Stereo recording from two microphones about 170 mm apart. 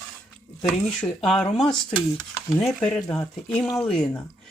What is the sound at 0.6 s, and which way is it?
Speech, 5° left (ahead or behind).